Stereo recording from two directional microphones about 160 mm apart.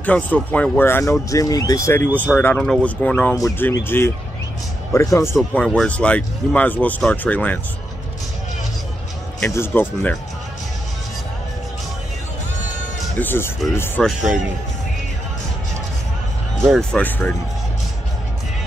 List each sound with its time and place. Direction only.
0.0 s speech: 10° left (ahead or behind)
9.4 s speech: 10° left (ahead or behind)
13.2 s speech: 15° left (ahead or behind)
14.0 s speech: 5° left (ahead or behind)
16.7 s speech: 10° left (ahead or behind)